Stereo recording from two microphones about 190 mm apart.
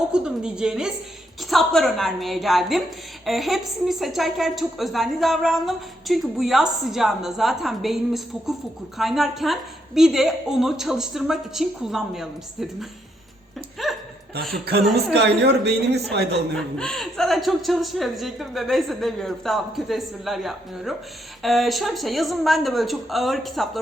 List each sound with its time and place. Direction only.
0.1 s a woman's voice: 5° right (ahead or behind)
13.8 s hiccup: centre (ahead or behind)
15.1 s speech: 60° right (ahead or behind)
16.6 s a woman's voice: 5° left (ahead or behind)